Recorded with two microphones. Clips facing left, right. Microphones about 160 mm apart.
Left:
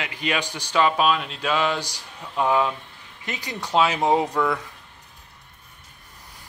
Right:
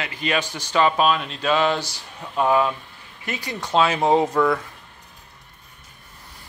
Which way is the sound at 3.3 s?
15° left (ahead or behind).